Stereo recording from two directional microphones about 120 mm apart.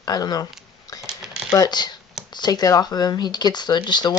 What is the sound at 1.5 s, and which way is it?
Speech, 35° left (ahead or behind).